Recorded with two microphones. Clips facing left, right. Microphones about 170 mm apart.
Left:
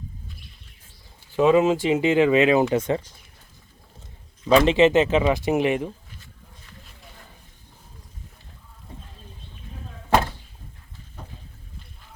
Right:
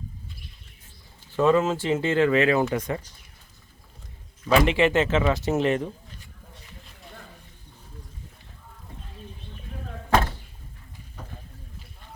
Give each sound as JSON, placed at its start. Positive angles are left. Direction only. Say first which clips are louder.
{"t": 1.4, "sound": "speech", "louder": "left 3 dB", "side_deg": 15}
{"t": 4.4, "sound": "speech", "louder": "left 4 dB", "side_deg": 25}